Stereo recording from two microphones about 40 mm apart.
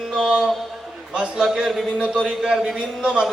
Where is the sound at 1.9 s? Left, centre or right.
Right.